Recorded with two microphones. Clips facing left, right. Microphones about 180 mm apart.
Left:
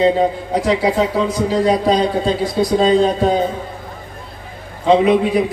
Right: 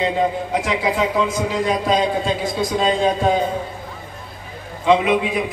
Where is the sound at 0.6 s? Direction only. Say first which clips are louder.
Left 6 dB; 40° left (ahead or behind).